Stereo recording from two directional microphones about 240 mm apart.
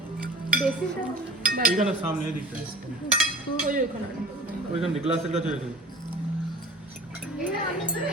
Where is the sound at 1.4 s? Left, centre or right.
Right.